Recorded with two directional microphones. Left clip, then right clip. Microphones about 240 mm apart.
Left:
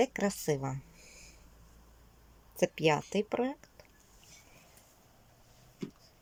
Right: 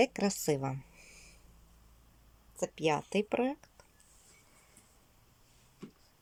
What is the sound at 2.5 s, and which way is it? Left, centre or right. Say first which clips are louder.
Speech: left 6 dB; left.